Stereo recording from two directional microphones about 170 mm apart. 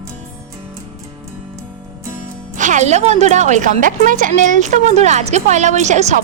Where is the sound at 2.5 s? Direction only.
45° right (ahead or behind).